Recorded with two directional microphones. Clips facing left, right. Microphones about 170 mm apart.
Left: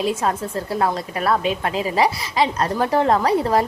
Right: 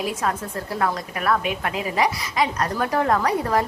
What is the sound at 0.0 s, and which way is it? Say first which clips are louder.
A woman's voice: left 4 dB; 25° left (ahead or behind).